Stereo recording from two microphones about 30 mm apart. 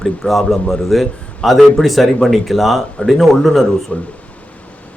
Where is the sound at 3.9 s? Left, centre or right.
Left.